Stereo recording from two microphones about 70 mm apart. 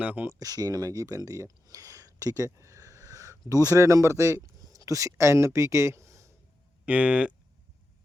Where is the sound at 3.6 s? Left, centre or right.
Right.